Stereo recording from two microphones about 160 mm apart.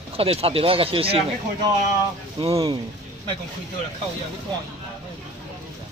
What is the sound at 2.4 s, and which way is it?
Speech, 35° right (ahead or behind).